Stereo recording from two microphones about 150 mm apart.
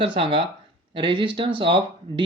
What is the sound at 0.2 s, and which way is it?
Speech, 35° right (ahead or behind).